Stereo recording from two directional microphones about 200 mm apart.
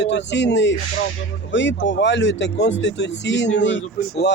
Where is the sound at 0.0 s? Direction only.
60° left (ahead or behind).